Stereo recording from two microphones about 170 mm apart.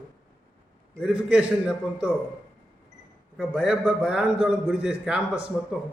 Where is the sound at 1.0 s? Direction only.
5° right (ahead or behind).